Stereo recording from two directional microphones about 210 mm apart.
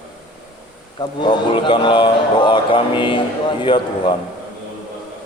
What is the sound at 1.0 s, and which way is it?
Speech, 20° left (ahead or behind).